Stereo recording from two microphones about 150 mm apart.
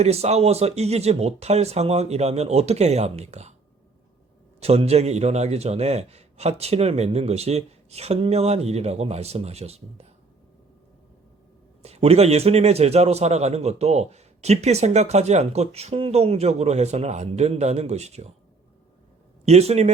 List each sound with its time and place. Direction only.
0.0 s a man's voice: 45° right (ahead or behind)
4.6 s a man's voice: 45° right (ahead or behind)
11.8 s a man's voice: 45° right (ahead or behind)
19.5 s a man's voice: 45° right (ahead or behind)